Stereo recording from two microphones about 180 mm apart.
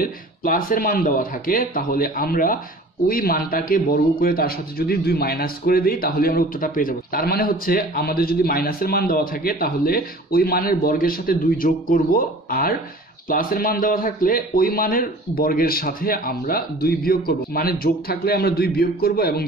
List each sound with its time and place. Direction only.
0.0 s a man's voice: 50° left (ahead or behind)